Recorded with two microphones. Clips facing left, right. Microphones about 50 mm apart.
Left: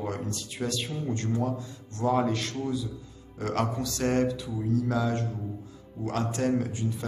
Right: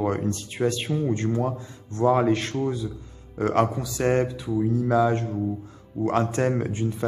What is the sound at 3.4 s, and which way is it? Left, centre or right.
Mantra, right.